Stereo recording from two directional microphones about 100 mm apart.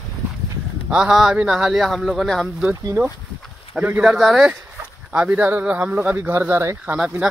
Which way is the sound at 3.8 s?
10° right (ahead or behind).